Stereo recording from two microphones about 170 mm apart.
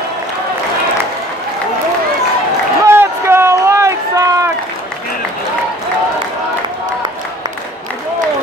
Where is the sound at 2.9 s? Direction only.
15° right (ahead or behind).